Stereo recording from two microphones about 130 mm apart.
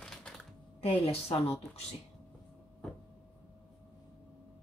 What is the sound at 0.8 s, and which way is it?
Speech, 50° left (ahead or behind).